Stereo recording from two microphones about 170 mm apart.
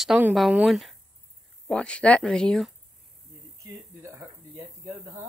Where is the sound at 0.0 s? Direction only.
5° right (ahead or behind).